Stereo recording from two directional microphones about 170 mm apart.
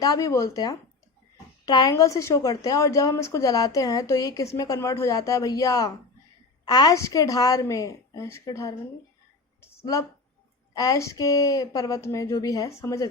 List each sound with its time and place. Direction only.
0.0 s a woman's voice: 20° left (ahead or behind)
9.6 s a sound: 15° left (ahead or behind)
10.8 s a woman's voice: 20° left (ahead or behind)